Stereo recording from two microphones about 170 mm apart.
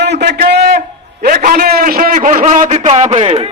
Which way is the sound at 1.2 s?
55° right (ahead or behind).